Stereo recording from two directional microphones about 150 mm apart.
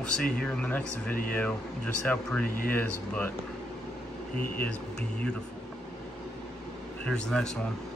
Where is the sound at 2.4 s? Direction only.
70° left (ahead or behind).